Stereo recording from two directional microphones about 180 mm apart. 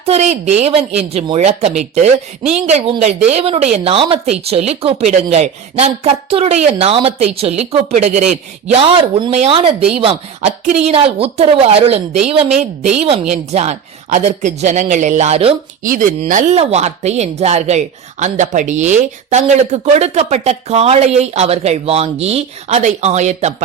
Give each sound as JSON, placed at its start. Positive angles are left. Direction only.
{"t": 0.0, "sound": "speech", "side_deg": -35}
{"t": 15.8, "sound": "speech", "side_deg": -50}